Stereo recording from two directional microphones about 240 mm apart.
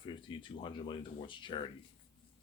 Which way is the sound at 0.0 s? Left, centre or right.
Centre.